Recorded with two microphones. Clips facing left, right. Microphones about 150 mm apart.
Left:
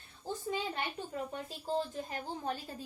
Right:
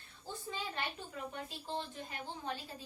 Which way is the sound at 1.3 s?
40° left (ahead or behind).